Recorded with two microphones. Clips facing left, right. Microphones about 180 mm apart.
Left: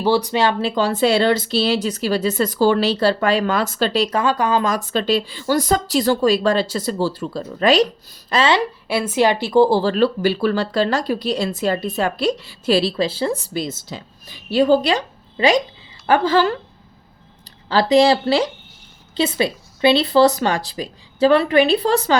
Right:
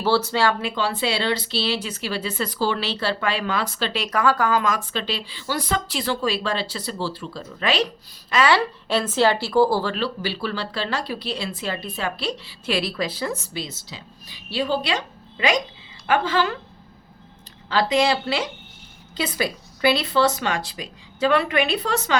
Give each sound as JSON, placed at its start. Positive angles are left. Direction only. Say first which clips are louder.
{"t": 0.0, "sound": "a woman's voice", "louder": "left 3 dB", "side_deg": 15}
{"t": 0.6, "sound": "speech", "louder": "left 7 dB", "side_deg": 40}
{"t": 4.6, "sound": "speech", "louder": "left 5 dB", "side_deg": 40}
{"t": 8.3, "sound": "a woman's voice", "louder": "left 2 dB", "side_deg": 25}
{"t": 8.9, "sound": "a woman's voice", "louder": "left 2 dB", "side_deg": 10}
{"t": 9.9, "sound": "speech", "louder": "left 9 dB", "side_deg": 45}
{"t": 13.5, "sound": "speech", "louder": "left 7 dB", "side_deg": 50}
{"t": 17.7, "sound": "speech", "louder": "left 6 dB", "side_deg": 35}